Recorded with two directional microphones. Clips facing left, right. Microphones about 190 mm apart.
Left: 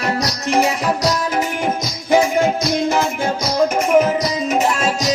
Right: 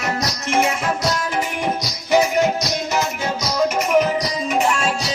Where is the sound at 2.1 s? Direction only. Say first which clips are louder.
Left 2 dB; 50° left (ahead or behind).